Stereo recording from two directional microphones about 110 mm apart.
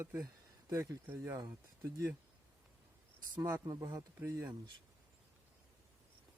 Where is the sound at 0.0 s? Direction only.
20° right (ahead or behind).